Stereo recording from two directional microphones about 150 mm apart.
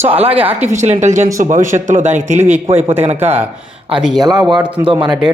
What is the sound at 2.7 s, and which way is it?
Speech, 15° right (ahead or behind).